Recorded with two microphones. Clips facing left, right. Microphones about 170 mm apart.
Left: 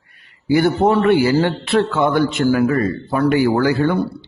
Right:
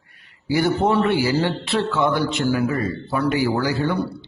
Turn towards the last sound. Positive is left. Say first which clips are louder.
# left 5 dB
turn(degrees=55)  # may be behind; listen again after turning